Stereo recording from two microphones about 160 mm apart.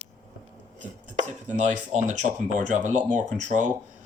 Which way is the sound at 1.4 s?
50° right (ahead or behind).